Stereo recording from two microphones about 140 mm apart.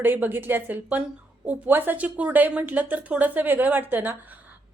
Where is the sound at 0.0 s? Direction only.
15° right (ahead or behind).